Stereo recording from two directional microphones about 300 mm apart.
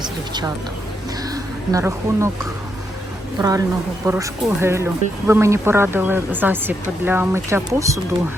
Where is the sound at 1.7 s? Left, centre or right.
Centre.